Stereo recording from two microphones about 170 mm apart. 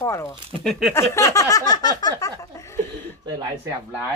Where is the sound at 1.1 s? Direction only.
20° left (ahead or behind).